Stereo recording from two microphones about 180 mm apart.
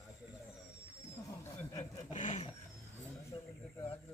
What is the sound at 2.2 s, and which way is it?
Vehicle, 45° left (ahead or behind).